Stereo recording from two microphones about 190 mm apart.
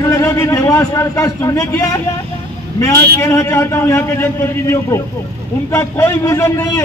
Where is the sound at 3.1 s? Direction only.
15° left (ahead or behind).